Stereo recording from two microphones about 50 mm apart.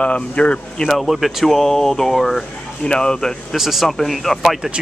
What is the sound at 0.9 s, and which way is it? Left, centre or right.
Speech, centre.